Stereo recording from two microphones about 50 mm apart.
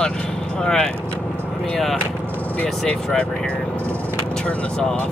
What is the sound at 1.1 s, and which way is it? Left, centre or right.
Vehicle, left.